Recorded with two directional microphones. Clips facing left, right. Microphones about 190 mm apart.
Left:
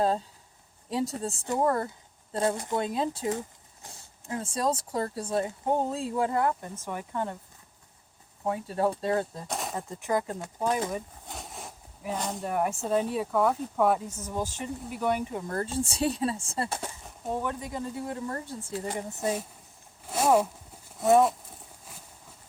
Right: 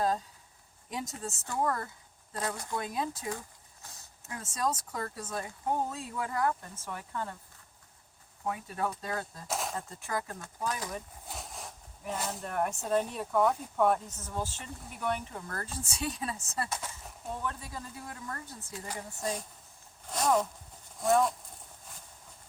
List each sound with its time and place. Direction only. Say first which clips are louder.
0.9 s speech: left 8 dB; 30° left (ahead or behind)
8.4 s speech: left 7 dB; 30° left (ahead or behind)
9.5 s a sound: left 1 dB; centre (ahead or behind)
9.7 s speech: left 7 dB; 15° left (ahead or behind)
11.3 s speech: left 2 dB; centre (ahead or behind)
14.2 s speech: left 5 dB; 15° left (ahead or behind); by 16.9 s 30° left (ahead or behind)
17.4 s speech: left 6 dB; 15° left (ahead or behind)
20.1 s a sound: left 5 dB; 5° left (ahead or behind)
21.0 s speech: left 5 dB; 5° left (ahead or behind)